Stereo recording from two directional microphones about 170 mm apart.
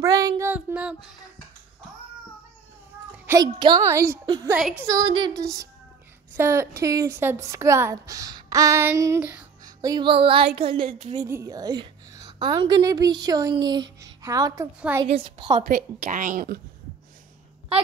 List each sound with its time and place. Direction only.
0.0 s a sound: 20° right (ahead or behind)
0.5 s a sound: 10° right (ahead or behind)
3.3 s a woman's voice: 25° right (ahead or behind)
4.6 s speech: 5° right (ahead or behind)
4.8 s a woman's voice: 25° right (ahead or behind); by 9.5 s 10° right (ahead or behind)
9.7 s a woman's voice: 20° right (ahead or behind)
11.1 s a woman's voice: 20° right (ahead or behind)
15.0 s a woman's voice: 30° right (ahead or behind)
15.7 s a woman's voice: 50° right (ahead or behind)